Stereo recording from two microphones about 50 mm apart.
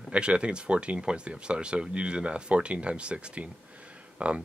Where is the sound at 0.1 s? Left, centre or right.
Right.